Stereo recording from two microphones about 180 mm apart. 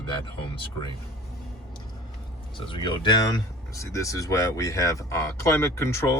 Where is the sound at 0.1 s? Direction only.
25° left (ahead or behind).